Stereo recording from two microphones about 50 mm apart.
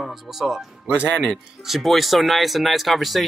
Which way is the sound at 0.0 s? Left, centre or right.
Centre.